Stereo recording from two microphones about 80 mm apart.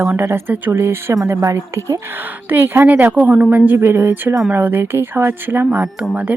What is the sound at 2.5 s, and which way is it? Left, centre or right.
Speech, right.